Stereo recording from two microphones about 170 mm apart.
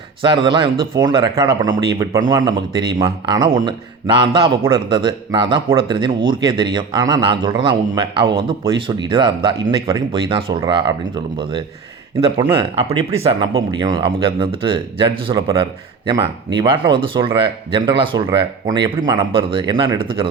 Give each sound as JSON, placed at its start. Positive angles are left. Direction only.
{"t": 0.2, "sound": "speech", "side_deg": -30}
{"t": 12.4, "sound": "speech", "side_deg": -30}